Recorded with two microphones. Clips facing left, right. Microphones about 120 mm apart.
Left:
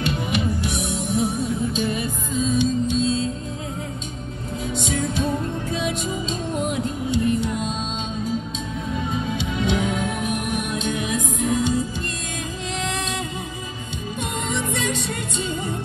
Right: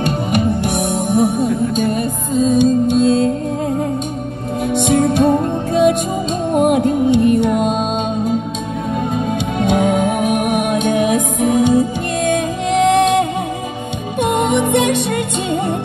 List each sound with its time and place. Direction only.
0.0 s music: 50° right (ahead or behind)
4.6 s music: 65° right (ahead or behind)
9.1 s music: 55° right (ahead or behind)